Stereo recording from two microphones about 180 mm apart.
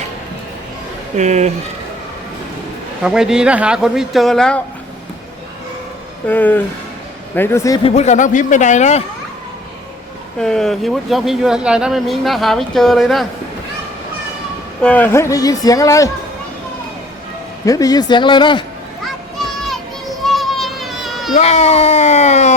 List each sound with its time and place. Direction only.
1.1 s speech: 40° right (ahead or behind)
3.0 s speech: 5° right (ahead or behind)
6.2 s speech: 10° left (ahead or behind)
7.9 s speech: 40° left (ahead or behind)
10.4 s speech: 5° left (ahead or behind)
14.8 s speech: 5° left (ahead or behind)
17.7 s a man's voice: 20° left (ahead or behind)
20.2 s children playing: centre (ahead or behind)
21.3 s speech: 40° left (ahead or behind)